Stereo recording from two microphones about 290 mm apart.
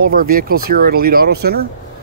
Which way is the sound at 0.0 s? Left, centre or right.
Right.